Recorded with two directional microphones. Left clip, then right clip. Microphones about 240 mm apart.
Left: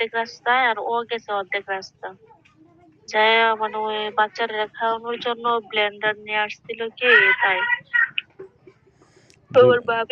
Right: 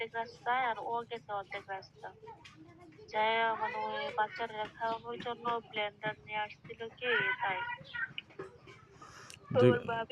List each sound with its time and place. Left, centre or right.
0.0 s speech: left
9.5 s speech: left